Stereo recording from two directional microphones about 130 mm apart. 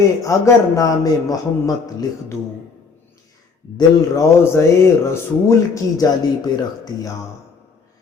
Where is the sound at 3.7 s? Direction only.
25° left (ahead or behind).